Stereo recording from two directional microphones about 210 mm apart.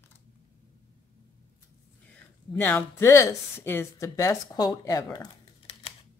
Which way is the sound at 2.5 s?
10° left (ahead or behind).